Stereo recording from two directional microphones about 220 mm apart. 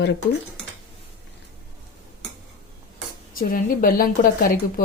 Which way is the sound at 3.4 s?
40° left (ahead or behind).